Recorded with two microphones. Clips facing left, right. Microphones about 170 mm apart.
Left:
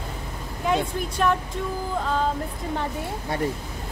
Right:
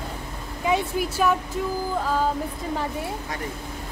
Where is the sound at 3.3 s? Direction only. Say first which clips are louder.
Left 7 dB; 30° left (ahead or behind).